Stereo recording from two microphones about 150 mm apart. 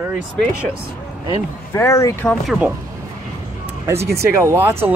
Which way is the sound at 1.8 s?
20° left (ahead or behind).